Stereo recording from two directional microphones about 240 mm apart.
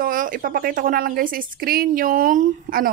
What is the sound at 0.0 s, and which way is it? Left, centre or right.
Speech, right.